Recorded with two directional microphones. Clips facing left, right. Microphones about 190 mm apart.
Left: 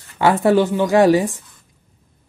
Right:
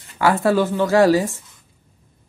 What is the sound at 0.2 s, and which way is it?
Speech, 20° left (ahead or behind).